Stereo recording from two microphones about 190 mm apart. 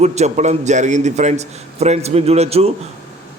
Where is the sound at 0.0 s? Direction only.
35° right (ahead or behind).